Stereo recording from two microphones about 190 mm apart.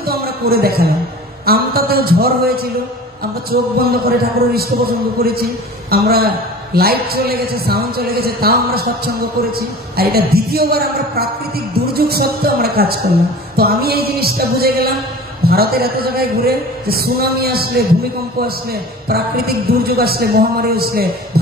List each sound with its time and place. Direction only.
0.0 s a sound: 55° right (ahead or behind)
1.4 s a man's voice: 50° right (ahead or behind)
9.9 s a man's voice: 55° right (ahead or behind)
19.0 s a man's voice: 55° right (ahead or behind)